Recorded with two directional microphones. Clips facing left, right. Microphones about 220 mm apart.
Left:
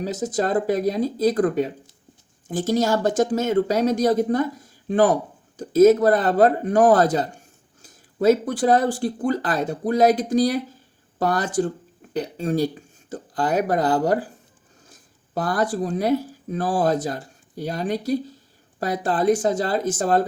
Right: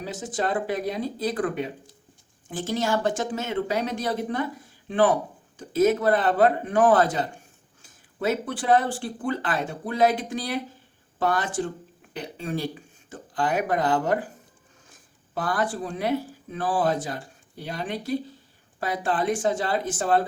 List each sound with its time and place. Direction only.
0.0 s speech: 40° left (ahead or behind)
15.4 s speech: 40° left (ahead or behind)